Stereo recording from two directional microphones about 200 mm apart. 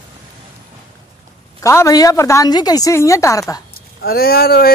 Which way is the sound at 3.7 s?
50° left (ahead or behind).